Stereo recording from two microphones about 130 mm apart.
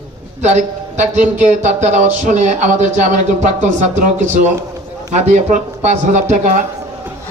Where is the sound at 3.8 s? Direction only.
65° right (ahead or behind).